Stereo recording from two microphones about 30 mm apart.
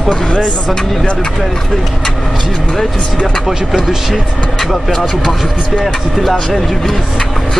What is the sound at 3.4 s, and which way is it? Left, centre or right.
Speech, centre.